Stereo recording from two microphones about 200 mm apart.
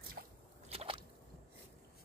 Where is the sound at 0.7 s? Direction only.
30° right (ahead or behind).